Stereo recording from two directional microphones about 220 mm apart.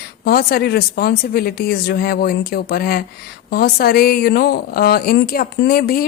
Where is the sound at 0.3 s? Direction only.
45° left (ahead or behind).